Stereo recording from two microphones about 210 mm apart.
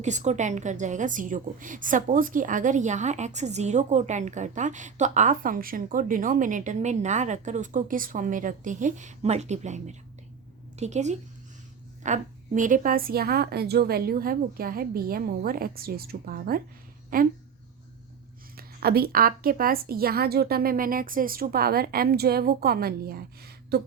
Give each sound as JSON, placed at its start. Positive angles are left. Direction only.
{"t": 0.0, "sound": "a woman's voice", "side_deg": -35}
{"t": 18.5, "sound": "a woman's voice", "side_deg": -45}